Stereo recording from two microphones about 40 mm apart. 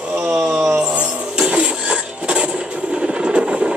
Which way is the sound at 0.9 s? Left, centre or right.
Right.